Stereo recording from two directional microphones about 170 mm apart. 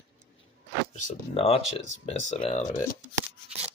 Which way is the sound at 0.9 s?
35° left (ahead or behind).